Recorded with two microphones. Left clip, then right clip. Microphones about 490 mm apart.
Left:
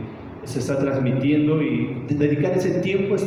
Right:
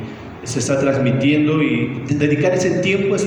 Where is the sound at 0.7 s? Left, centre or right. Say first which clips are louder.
Right 6 dB; centre.